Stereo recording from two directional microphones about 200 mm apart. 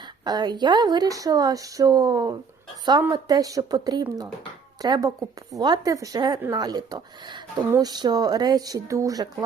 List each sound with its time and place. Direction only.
0.0 s a woman's voice: 20° right (ahead or behind)